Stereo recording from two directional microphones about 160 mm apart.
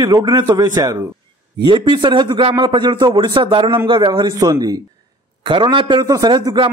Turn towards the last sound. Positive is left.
turn(degrees=-30)  # may be behind; listen again after turning